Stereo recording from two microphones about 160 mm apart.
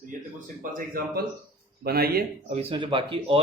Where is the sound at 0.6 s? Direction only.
60° right (ahead or behind).